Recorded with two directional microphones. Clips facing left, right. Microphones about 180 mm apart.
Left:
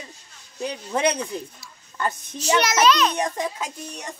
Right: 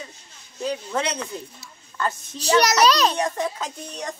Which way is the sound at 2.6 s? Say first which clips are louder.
Right 1 dB; 40° right (ahead or behind).